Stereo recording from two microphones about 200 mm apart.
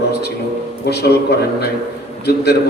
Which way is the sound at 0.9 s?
55° left (ahead or behind).